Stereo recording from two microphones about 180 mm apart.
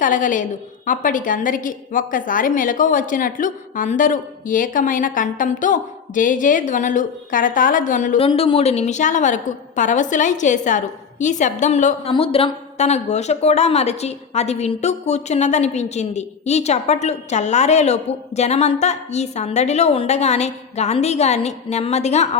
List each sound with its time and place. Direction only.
0.0 s a woman's voice: 45° left (ahead or behind)
8.2 s a woman's voice: 30° left (ahead or behind)